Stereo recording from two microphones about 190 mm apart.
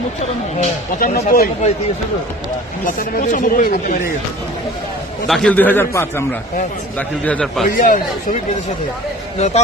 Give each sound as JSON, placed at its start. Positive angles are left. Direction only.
{"t": 0.2, "sound": "speech", "side_deg": 40}
{"t": 2.8, "sound": "speech", "side_deg": 45}
{"t": 5.3, "sound": "a man's voice", "side_deg": 5}
{"t": 7.3, "sound": "a man's voice", "side_deg": 5}
{"t": 7.7, "sound": "speech", "side_deg": 45}